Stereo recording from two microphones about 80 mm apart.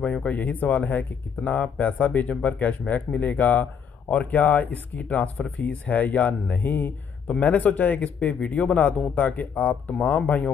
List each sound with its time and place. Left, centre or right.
0.0 s speech: centre
9.1 s speech: left